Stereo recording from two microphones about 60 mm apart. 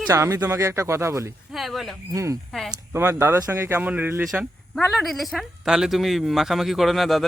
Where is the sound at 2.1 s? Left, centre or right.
Right.